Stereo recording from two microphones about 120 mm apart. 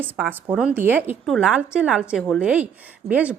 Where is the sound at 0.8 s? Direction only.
15° right (ahead or behind).